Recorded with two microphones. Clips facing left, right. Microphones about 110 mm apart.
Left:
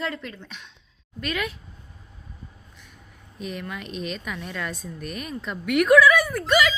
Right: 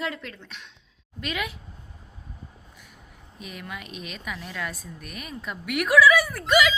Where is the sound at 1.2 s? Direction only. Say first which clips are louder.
Left 2 dB; 15° right (ahead or behind).